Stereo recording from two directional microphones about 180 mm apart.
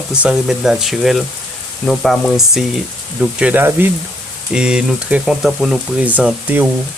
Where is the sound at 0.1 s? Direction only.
5° right (ahead or behind).